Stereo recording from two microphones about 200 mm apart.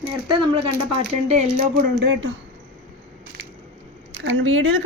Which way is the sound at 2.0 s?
65° right (ahead or behind).